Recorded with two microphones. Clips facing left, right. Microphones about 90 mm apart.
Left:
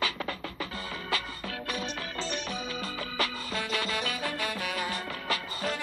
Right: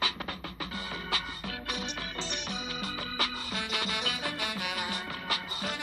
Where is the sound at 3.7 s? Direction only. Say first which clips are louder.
Left 3 dB; 20° right (ahead or behind).